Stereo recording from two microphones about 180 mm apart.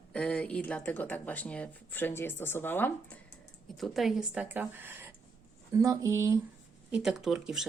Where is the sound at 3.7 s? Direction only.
Centre (ahead or behind); by 6.4 s 15° right (ahead or behind).